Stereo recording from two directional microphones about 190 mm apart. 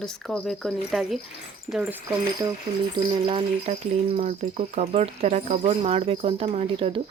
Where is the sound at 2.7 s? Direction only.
20° right (ahead or behind).